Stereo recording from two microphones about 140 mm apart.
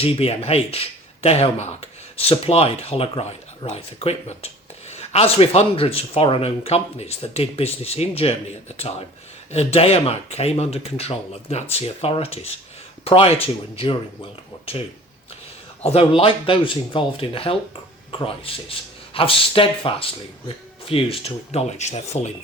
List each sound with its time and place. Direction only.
0.0 s speech: 45° left (ahead or behind)
15.8 s speech: 45° left (ahead or behind)